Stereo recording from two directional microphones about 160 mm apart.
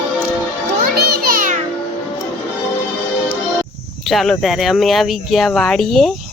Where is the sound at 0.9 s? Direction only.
65° right (ahead or behind).